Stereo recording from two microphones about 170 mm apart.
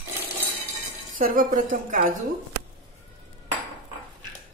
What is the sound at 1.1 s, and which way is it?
Speech, 55° right (ahead or behind).